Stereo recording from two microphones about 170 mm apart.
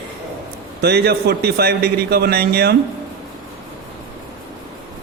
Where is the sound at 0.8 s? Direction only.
70° right (ahead or behind).